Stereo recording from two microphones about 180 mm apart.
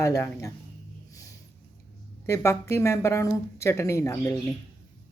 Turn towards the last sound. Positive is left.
turn(degrees=15)  # may be behind; listen again after turning